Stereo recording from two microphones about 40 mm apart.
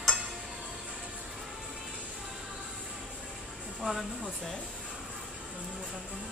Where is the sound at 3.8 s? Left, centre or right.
Centre.